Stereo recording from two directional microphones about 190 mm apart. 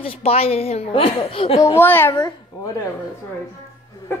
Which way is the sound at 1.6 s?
15° left (ahead or behind).